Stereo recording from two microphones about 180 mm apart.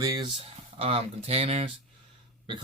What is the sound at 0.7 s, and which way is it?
Speech, 35° right (ahead or behind).